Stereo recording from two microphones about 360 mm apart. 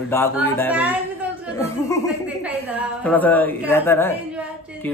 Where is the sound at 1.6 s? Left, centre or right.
Centre.